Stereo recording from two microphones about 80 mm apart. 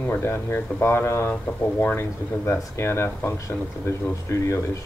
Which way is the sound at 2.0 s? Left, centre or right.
Left.